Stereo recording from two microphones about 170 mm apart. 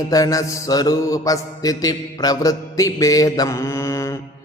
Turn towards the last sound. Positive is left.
turn(degrees=15)  # may be behind; listen again after turning